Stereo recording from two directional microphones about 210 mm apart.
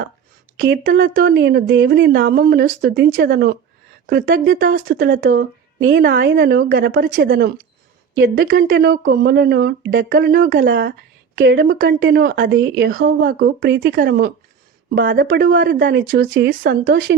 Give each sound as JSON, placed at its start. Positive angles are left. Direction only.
{"t": 0.9, "sound": "speech", "side_deg": -40}
{"t": 6.0, "sound": "speech", "side_deg": -55}